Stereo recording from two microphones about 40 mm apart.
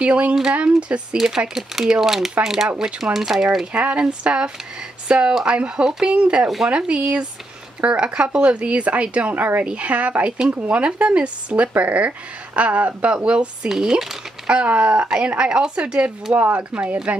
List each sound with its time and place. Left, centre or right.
0.0 s a woman's voice: right
1.1 s speech: centre
3.7 s a woman's voice: right
5.9 s speech: centre
6.1 s a woman's voice: right
9.3 s speech: right
9.6 s speech: right
13.7 s speech: centre
14.5 s a woman's voice: right
16.3 s speech: right